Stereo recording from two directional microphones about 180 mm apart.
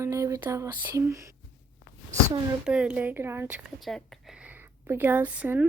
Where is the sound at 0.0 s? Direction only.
15° right (ahead or behind).